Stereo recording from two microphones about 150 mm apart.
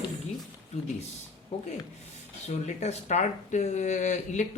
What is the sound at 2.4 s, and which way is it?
Speech, 45° left (ahead or behind).